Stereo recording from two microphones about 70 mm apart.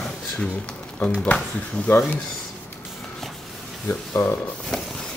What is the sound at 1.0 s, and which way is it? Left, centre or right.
Speech, centre.